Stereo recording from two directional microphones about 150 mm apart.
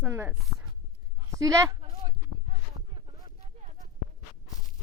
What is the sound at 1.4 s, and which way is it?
Speech, 25° right (ahead or behind).